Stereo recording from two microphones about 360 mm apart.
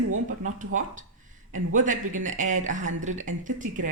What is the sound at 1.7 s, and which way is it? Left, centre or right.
Speech, right.